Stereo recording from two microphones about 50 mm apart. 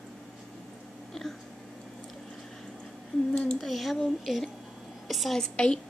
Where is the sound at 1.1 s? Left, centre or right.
Centre.